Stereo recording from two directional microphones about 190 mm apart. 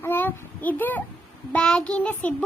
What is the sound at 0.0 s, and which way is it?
A child's voice, 10° left (ahead or behind).